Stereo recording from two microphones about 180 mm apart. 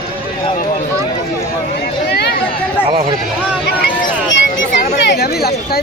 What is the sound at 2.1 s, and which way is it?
Chatter, 65° left (ahead or behind).